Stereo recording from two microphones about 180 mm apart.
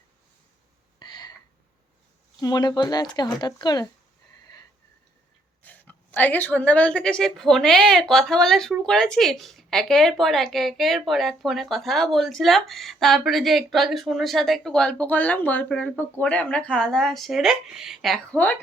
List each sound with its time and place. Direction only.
0.9 s a sound: 25° left (ahead or behind)
2.4 s speech: 20° left (ahead or behind)
5.6 s a woman's voice: 10° left (ahead or behind)